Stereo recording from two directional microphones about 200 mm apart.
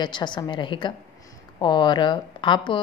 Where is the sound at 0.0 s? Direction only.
20° left (ahead or behind).